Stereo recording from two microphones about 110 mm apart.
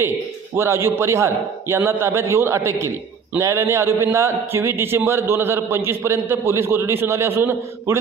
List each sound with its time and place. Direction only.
0.5 s a man's voice: 25° right (ahead or behind)